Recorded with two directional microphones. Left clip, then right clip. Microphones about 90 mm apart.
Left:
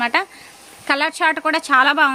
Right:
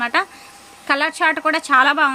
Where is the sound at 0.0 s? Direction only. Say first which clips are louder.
Even; 30° left (ahead or behind).